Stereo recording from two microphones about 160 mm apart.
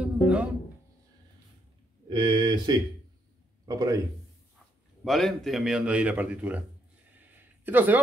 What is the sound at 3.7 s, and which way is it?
Speech, 20° right (ahead or behind).